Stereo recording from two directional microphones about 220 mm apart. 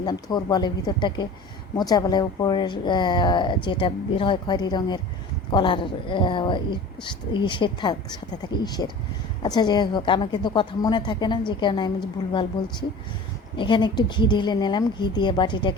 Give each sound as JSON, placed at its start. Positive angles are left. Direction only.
{"t": 0.0, "sound": "speech", "side_deg": 20}
{"t": 13.6, "sound": "speech", "side_deg": 20}